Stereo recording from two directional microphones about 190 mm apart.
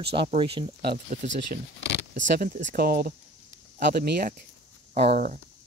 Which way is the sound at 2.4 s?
50° right (ahead or behind).